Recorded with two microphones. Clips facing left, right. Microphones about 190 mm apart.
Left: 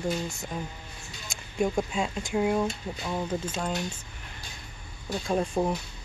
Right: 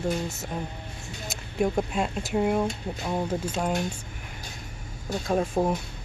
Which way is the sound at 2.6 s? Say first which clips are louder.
Right 2 dB; 20° right (ahead or behind).